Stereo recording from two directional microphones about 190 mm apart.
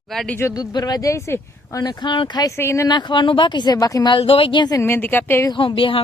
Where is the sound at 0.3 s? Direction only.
15° left (ahead or behind).